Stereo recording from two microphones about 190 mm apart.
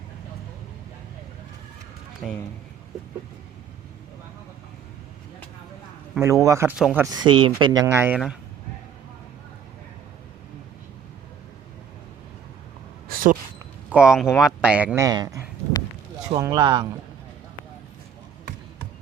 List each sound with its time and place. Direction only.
2.2 s speech: centre (ahead or behind)
6.1 s speech: 15° right (ahead or behind)
6.7 s speech: 5° right (ahead or behind)
7.0 s speech: 20° right (ahead or behind)
13.9 s speech: 5° right (ahead or behind); by 17.0 s 20° right (ahead or behind)